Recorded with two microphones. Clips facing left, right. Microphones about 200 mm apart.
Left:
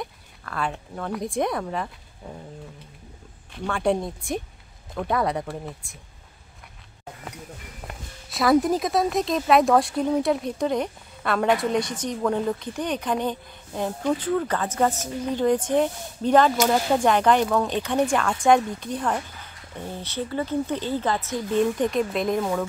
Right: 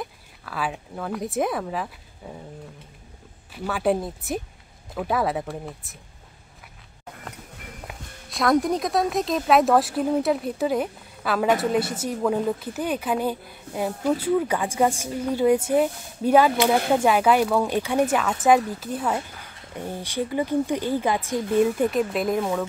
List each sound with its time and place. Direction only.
0.0 s speech: 5° right (ahead or behind)
3.5 s speech: 5° right (ahead or behind)
7.8 s speech: centre (ahead or behind)